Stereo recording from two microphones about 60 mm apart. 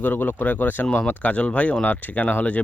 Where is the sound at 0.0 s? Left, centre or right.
Left.